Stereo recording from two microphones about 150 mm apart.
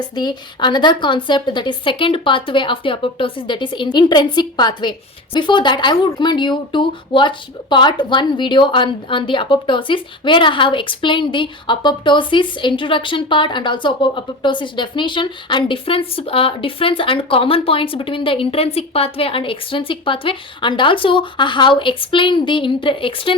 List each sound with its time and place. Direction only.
0.2 s a woman's voice: 30° left (ahead or behind)